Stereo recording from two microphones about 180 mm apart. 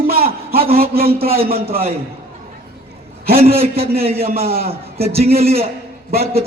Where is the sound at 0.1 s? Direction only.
55° right (ahead or behind).